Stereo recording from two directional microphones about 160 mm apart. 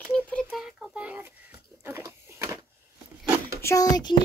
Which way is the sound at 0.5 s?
5° right (ahead or behind).